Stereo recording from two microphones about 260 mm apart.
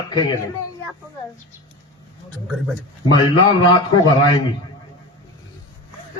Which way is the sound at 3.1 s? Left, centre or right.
Centre.